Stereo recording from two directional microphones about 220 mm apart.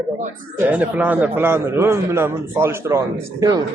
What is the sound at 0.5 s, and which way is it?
A man's voice, 10° right (ahead or behind).